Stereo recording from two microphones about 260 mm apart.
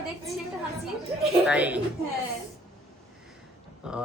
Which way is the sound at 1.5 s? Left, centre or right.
Centre.